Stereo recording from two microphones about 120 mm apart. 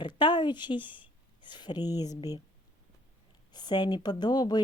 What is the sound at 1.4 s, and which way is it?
Speech, 40° left (ahead or behind).